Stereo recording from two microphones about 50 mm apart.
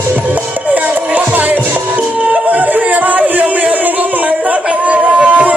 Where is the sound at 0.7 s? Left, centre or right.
Right.